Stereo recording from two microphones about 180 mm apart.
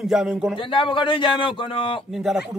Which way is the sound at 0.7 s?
30° left (ahead or behind).